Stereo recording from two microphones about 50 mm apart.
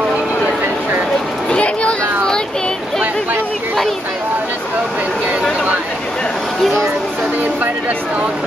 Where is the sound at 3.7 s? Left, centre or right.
Centre.